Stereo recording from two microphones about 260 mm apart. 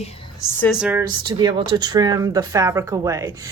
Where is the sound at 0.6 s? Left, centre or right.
Centre.